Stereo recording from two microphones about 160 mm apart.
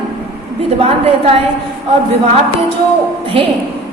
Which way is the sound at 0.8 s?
40° right (ahead or behind).